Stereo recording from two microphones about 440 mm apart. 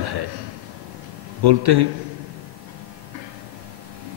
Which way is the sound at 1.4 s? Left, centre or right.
Right.